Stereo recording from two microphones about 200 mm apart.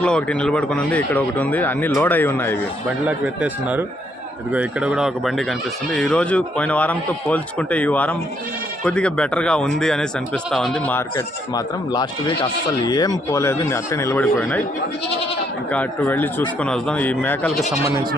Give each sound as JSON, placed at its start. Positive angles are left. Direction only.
{"t": 0.0, "sound": "speech", "side_deg": 5}
{"t": 3.1, "sound": "speech", "side_deg": -5}
{"t": 11.5, "sound": "speech", "side_deg": 20}
{"t": 15.7, "sound": "speech", "side_deg": 10}